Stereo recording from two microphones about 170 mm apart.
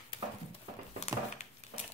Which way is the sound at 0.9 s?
40° left (ahead or behind).